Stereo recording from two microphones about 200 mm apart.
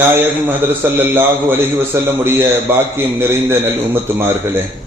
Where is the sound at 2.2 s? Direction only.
10° right (ahead or behind).